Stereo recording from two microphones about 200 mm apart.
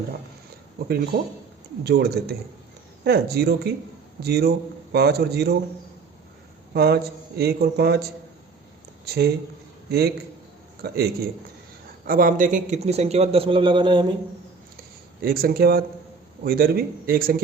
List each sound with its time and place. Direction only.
0.8 s a man's voice: 50° right (ahead or behind)
6.7 s a man's voice: 55° right (ahead or behind)
9.0 s speech: 50° right (ahead or behind)
10.8 s a man's voice: 50° right (ahead or behind); by 14.1 s 25° right (ahead or behind)
15.2 s a man's voice: 50° right (ahead or behind)